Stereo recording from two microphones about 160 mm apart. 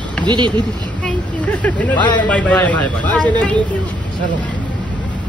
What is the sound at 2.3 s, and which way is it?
Speech, 10° left (ahead or behind).